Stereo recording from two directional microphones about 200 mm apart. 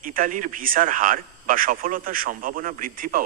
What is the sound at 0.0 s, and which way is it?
Speech, 45° right (ahead or behind).